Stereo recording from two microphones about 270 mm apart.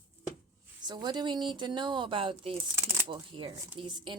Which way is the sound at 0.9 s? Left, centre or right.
Centre.